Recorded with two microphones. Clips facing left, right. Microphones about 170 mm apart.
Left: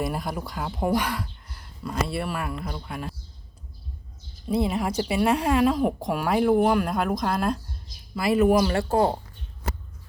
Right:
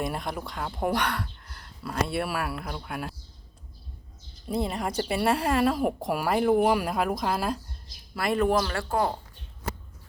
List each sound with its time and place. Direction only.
0.0 s a woman's voice: centre (ahead or behind)
4.4 s a woman's voice: centre (ahead or behind)
8.6 s speech: 25° left (ahead or behind)